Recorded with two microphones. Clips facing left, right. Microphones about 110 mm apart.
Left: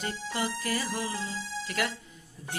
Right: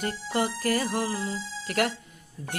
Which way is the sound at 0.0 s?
50° right (ahead or behind).